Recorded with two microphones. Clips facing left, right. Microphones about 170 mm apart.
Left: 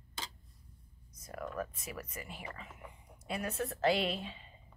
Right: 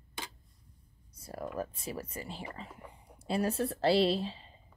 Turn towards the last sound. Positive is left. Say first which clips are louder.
# right 7 dB
turn(degrees=-30)  # may be behind; listen again after turning